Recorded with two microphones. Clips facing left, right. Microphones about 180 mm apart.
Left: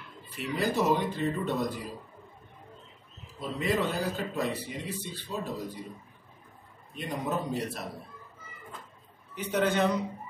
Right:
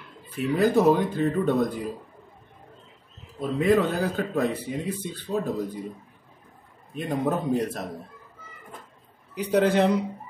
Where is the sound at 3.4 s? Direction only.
50° right (ahead or behind).